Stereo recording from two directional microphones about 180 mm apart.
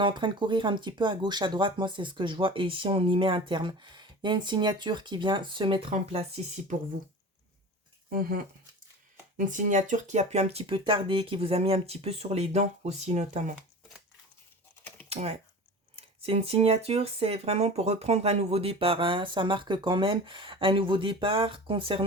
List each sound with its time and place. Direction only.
0.0 s speech: 25° right (ahead or behind)
8.1 s speech: 50° right (ahead or behind)
15.1 s speech: 35° right (ahead or behind)